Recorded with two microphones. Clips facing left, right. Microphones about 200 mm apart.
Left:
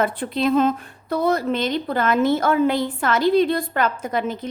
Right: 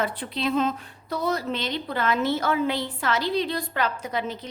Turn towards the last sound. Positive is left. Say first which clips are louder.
# left 5 dB
turn(degrees=50)  # may be behind; listen again after turning